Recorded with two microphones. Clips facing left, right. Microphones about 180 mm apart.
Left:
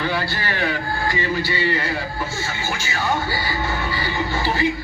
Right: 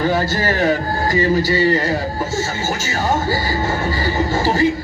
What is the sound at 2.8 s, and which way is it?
Music, 40° right (ahead or behind).